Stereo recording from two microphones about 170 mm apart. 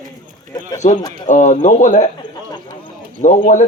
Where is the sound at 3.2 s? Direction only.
45° left (ahead or behind).